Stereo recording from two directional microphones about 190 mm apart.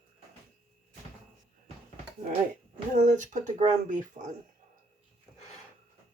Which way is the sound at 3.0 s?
40° right (ahead or behind).